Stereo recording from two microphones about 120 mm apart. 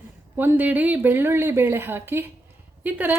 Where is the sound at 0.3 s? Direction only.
15° right (ahead or behind).